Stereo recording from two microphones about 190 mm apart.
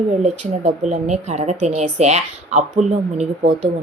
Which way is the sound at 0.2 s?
35° right (ahead or behind).